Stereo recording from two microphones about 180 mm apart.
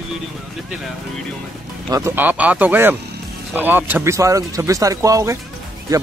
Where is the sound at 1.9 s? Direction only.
15° right (ahead or behind).